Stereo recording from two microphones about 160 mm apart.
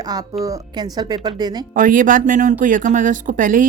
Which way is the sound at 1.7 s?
55° right (ahead or behind).